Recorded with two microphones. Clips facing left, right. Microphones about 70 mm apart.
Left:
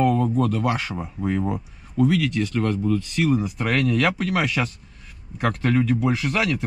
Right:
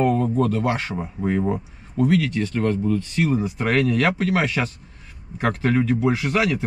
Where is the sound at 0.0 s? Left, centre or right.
Centre.